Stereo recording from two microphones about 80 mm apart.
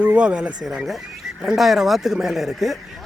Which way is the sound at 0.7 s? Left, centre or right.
Centre.